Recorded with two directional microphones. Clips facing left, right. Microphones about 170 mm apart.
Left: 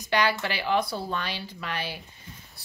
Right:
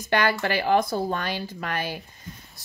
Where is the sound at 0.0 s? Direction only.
50° right (ahead or behind).